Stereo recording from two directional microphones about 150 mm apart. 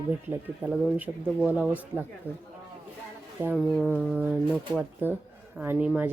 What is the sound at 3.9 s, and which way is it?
Speech, 10° right (ahead or behind).